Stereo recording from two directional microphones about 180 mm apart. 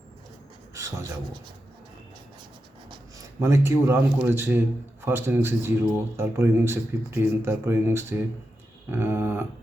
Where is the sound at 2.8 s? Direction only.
20° right (ahead or behind).